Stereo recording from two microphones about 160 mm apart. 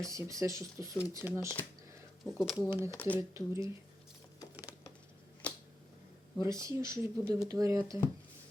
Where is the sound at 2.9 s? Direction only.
10° left (ahead or behind).